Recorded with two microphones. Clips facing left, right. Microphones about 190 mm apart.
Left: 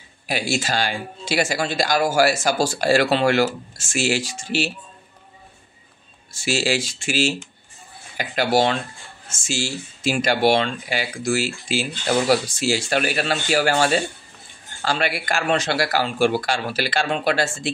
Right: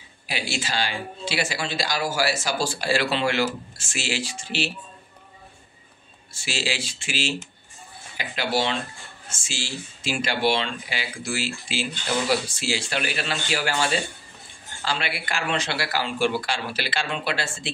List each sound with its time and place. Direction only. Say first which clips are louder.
0.3 s speech: left 6 dB; 45° left (ahead or behind)
6.3 s speech: left 8 dB; 45° left (ahead or behind)